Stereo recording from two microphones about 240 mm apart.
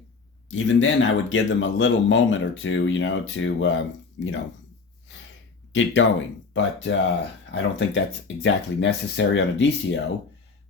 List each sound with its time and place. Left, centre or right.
0.5 s speech: left
5.7 s speech: left